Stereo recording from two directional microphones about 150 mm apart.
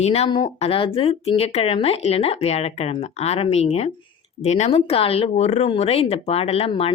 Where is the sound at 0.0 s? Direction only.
45° left (ahead or behind).